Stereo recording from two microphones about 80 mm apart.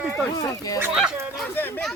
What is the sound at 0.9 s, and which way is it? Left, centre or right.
Speech, centre.